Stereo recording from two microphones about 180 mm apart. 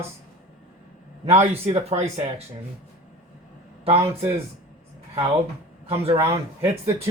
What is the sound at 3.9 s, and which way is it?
Speech, 15° right (ahead or behind).